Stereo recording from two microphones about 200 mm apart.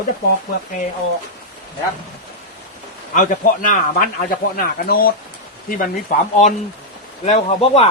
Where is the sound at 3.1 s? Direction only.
40° left (ahead or behind).